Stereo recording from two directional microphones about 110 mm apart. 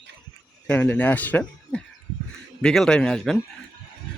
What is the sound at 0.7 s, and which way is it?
Speech, 15° left (ahead or behind).